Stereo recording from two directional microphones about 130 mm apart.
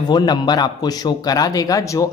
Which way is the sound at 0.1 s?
30° left (ahead or behind).